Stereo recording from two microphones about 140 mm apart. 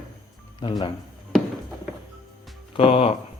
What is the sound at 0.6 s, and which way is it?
Speech, 35° left (ahead or behind).